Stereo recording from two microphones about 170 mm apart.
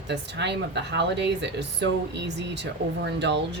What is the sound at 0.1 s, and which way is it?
Speech, 90° right.